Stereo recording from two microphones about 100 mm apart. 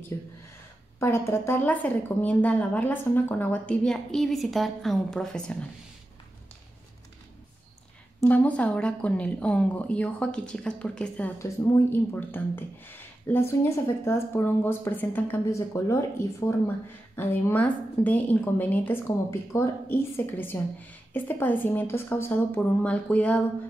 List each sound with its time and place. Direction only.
0.1 s speech: 30° left (ahead or behind)
3.9 s a woman's voice: 5° left (ahead or behind)
8.2 s speech: 15° left (ahead or behind)
11.3 s speech: 30° left (ahead or behind)
15.5 s speech: 30° left (ahead or behind); by 23.4 s 15° left (ahead or behind)